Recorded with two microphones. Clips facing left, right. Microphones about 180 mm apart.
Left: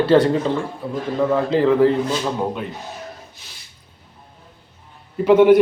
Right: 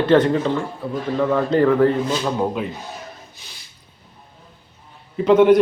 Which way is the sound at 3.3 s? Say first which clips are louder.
Right 1 dB; centre (ahead or behind).